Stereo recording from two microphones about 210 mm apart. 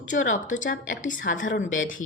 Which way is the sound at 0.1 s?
35° left (ahead or behind).